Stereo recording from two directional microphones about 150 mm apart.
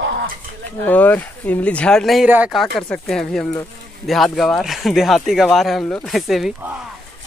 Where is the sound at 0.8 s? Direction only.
10° left (ahead or behind).